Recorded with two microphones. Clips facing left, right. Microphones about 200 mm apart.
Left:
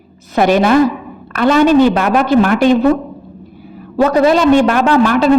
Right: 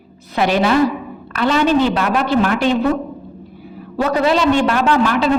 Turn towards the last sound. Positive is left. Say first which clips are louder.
# left 4 dB
turn(degrees=45)  # may be behind; listen again after turning